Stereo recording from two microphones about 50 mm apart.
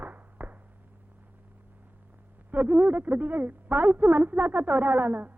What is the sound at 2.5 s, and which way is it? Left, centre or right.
A woman's voice, right.